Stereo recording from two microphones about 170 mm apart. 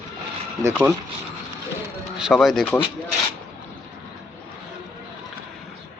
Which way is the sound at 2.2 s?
Centre (ahead or behind).